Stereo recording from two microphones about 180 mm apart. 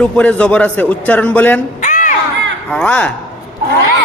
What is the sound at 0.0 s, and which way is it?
A man's voice, 5° left (ahead or behind).